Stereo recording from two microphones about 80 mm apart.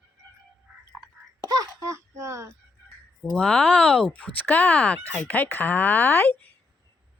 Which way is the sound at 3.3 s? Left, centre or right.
Centre.